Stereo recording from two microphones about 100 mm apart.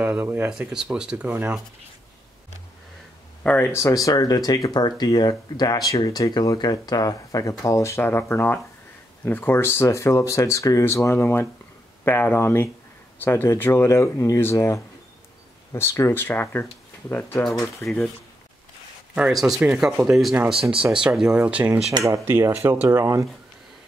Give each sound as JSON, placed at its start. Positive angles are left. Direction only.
{"t": 0.0, "sound": "speech", "side_deg": -20}
{"t": 0.5, "sound": "speech", "side_deg": -5}
{"t": 3.4, "sound": "speech", "side_deg": 15}
{"t": 3.7, "sound": "speech", "side_deg": 35}
{"t": 19.1, "sound": "speech", "side_deg": -5}
{"t": 22.0, "sound": "speech", "side_deg": -30}